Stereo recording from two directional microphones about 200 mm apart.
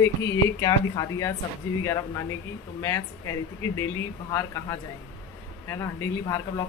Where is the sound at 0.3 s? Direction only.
15° left (ahead or behind).